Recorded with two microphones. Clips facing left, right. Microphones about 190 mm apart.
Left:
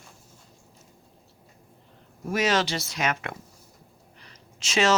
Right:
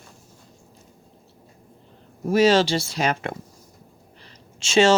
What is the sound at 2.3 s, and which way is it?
Speech, 30° right (ahead or behind).